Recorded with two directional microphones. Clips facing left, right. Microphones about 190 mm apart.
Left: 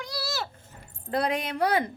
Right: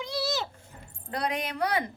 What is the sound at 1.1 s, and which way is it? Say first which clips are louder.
Speech: left 4 dB; 25° left (ahead or behind).